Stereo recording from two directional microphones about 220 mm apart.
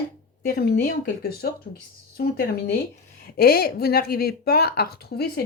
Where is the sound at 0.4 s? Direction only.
45° left (ahead or behind).